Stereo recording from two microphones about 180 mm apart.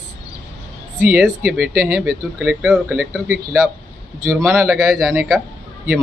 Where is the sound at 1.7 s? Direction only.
55° right (ahead or behind).